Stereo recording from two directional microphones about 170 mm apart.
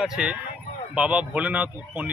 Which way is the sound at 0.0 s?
5° right (ahead or behind).